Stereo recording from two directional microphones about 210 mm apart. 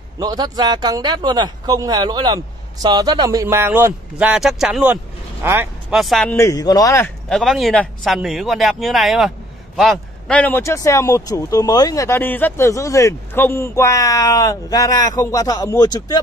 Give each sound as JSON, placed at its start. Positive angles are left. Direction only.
{"t": 0.2, "sound": "speech", "side_deg": -20}
{"t": 6.3, "sound": "speech", "side_deg": 15}
{"t": 7.2, "sound": "speech", "side_deg": 0}